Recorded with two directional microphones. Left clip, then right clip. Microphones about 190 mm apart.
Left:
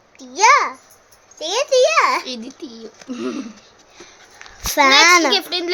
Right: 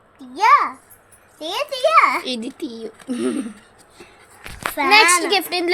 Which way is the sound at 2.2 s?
20° right (ahead or behind).